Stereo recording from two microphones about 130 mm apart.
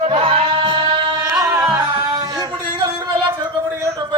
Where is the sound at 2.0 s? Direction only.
30° right (ahead or behind).